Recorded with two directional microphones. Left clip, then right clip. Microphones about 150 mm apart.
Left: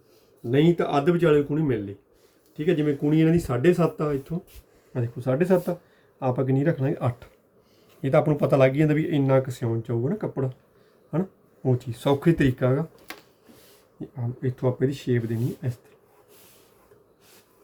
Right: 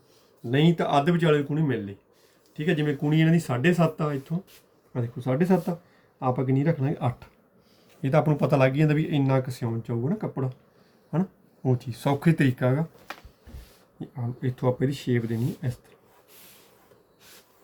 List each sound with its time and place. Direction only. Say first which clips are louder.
0.5 s speech: left 1 dB; 10° right (ahead or behind)
2.6 s speech: left 3 dB; 20° right (ahead or behind)
4.9 s speech: left 2 dB; 5° left (ahead or behind)
14.2 s speech: left 2 dB; 10° right (ahead or behind)